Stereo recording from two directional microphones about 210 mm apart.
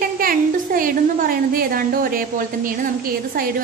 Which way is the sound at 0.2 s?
45° right (ahead or behind).